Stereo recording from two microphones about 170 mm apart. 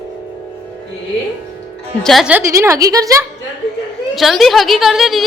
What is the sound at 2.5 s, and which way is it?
Speech, 20° right (ahead or behind).